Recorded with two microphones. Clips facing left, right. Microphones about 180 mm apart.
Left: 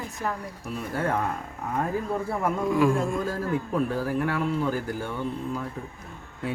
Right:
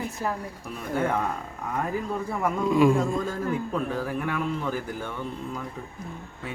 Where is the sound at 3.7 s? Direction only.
10° left (ahead or behind).